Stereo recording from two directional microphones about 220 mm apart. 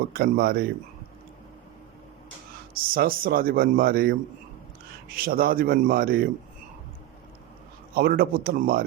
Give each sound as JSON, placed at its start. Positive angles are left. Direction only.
{"t": 0.1, "sound": "speech", "side_deg": -40}
{"t": 2.7, "sound": "speech", "side_deg": -40}
{"t": 7.9, "sound": "speech", "side_deg": -40}